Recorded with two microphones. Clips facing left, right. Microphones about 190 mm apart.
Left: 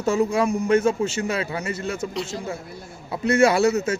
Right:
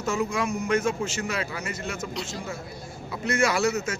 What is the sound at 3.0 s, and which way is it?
Speech, 30° left (ahead or behind).